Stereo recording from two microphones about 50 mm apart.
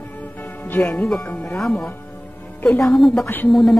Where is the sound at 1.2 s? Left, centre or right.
Left.